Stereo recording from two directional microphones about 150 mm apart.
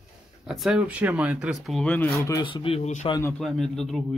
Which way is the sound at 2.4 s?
35° left (ahead or behind).